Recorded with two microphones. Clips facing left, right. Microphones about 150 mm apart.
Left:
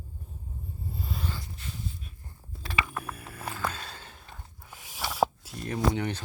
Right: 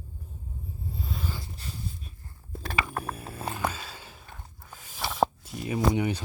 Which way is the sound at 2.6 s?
40° right (ahead or behind).